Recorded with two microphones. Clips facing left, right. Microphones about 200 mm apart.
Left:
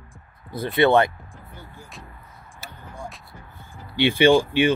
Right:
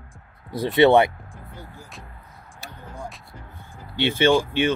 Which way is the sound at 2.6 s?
Centre (ahead or behind).